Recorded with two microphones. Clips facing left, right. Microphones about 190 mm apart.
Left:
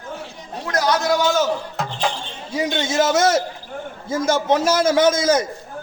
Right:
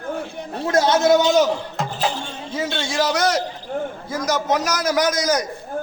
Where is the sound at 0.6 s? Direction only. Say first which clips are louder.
Right 4 dB; 25° right (ahead or behind).